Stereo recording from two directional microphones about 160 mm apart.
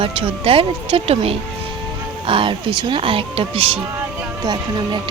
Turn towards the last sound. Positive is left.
turn(degrees=-30)  # may be behind; listen again after turning